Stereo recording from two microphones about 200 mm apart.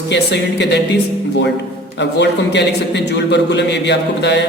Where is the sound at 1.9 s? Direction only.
60° left (ahead or behind).